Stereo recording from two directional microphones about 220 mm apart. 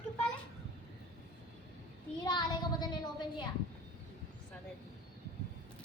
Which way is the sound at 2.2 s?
20° left (ahead or behind).